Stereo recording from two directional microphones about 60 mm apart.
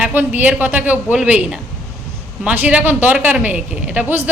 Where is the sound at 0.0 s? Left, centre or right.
Right.